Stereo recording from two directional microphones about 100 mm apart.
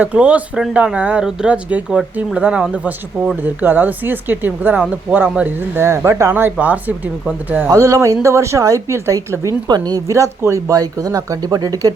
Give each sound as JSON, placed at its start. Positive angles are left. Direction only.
{"t": 0.0, "sound": "a woman's voice", "side_deg": -15}
{"t": 6.3, "sound": "speech", "side_deg": -15}
{"t": 7.7, "sound": "a woman's voice", "side_deg": -30}
{"t": 9.6, "sound": "speech", "side_deg": -45}
{"t": 10.1, "sound": "speech", "side_deg": -30}